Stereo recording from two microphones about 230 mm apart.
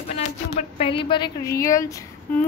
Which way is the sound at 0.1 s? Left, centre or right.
Left.